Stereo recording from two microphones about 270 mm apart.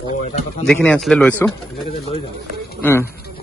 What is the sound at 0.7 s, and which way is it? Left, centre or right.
Speech, centre.